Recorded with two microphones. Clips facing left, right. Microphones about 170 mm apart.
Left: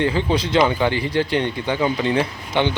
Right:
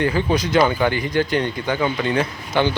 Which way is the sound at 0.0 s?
25° left (ahead or behind).